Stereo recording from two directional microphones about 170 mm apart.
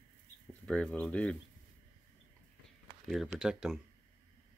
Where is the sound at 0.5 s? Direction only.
5° left (ahead or behind).